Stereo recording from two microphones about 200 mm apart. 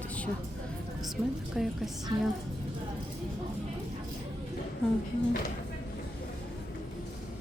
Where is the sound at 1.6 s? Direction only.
Centre (ahead or behind).